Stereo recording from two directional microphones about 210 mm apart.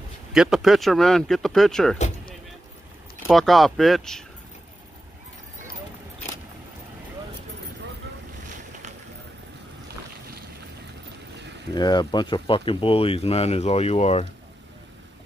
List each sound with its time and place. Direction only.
0.3 s speech: centre (ahead or behind)
2.0 s a sound: 35° left (ahead or behind)
3.3 s speech: centre (ahead or behind)
11.7 s speech: 20° left (ahead or behind)